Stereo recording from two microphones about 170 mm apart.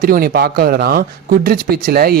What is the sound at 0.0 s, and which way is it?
Speech, 60° right (ahead or behind).